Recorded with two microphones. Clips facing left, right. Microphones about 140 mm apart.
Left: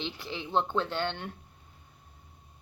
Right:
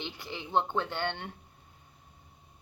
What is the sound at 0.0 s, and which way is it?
Speech, 15° right (ahead or behind).